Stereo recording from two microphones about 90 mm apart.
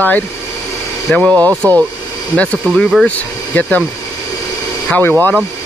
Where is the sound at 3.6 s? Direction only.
15° left (ahead or behind).